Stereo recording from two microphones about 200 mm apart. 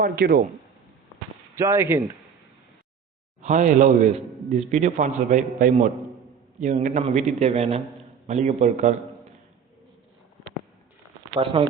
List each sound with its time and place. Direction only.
0.0 s a man's voice: 45° right (ahead or behind)
1.5 s speech: 15° right (ahead or behind)
3.4 s a man's voice: 40° right (ahead or behind)
11.3 s speech: 25° right (ahead or behind)